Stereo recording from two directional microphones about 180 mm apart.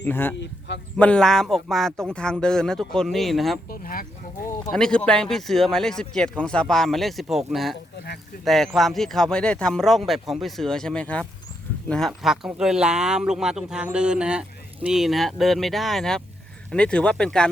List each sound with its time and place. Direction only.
0.0 s speech: 10° left (ahead or behind)
3.7 s speech: 55° left (ahead or behind)
4.7 s speech: 5° left (ahead or behind)